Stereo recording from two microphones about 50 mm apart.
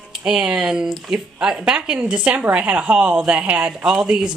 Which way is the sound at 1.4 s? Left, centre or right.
Centre.